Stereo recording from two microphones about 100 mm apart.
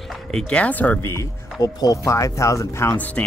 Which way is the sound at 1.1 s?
35° left (ahead or behind).